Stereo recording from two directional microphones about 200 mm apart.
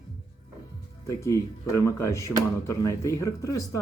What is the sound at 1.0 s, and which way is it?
Speech, 15° left (ahead or behind).